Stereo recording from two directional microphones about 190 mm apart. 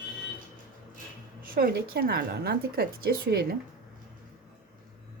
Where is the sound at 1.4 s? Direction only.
50° right (ahead or behind).